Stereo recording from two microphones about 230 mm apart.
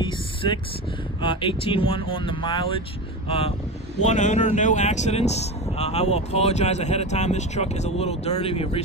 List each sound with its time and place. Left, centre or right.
0.0 s vehicle: left
1.2 s speech: left